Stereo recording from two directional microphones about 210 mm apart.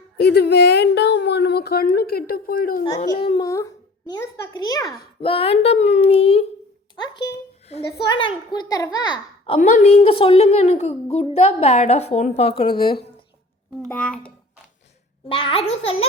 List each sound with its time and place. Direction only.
0.2 s speech: 50° left (ahead or behind)
3.0 s a child's voice: 25° left (ahead or behind)
9.6 s a woman's voice: 35° left (ahead or behind)
13.8 s a child's voice: 5° left (ahead or behind)
15.3 s a child's voice: 25° left (ahead or behind)